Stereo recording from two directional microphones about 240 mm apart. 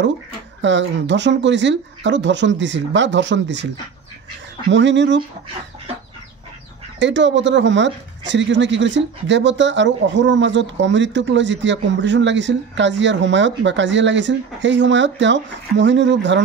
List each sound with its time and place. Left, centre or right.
0.6 s speech: right
4.6 s speech: right
7.0 s speech: right